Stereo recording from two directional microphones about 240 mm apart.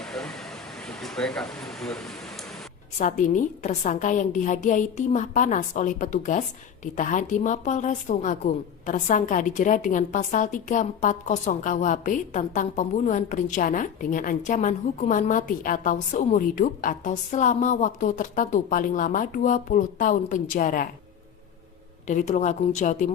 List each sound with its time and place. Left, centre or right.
0.0 s air conditioning: centre
3.0 s a woman's voice: left
22.0 s a woman's voice: left